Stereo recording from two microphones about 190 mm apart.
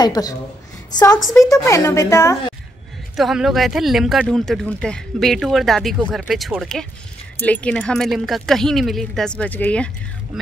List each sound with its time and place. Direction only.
0.0 s a woman's voice: 20° left (ahead or behind)
3.2 s speech: centre (ahead or behind)